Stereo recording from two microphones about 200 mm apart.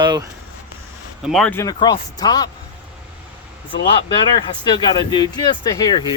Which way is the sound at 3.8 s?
25° left (ahead or behind).